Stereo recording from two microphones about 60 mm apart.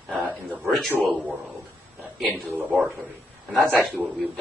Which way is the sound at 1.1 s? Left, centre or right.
Right.